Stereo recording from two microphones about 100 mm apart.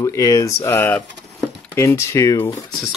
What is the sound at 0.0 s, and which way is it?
Speech, 30° left (ahead or behind).